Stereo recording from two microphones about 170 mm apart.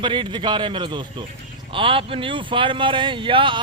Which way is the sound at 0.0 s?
30° right (ahead or behind).